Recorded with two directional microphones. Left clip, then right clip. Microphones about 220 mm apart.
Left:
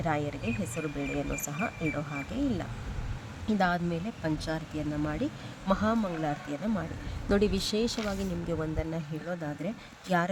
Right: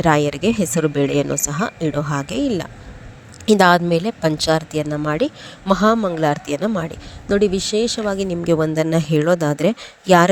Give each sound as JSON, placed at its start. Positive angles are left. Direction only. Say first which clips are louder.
{"t": 0.0, "sound": "a woman's voice", "louder": "right 15 dB", "side_deg": -40}
{"t": 7.3, "sound": "a woman's voice", "louder": "right 11 dB", "side_deg": -25}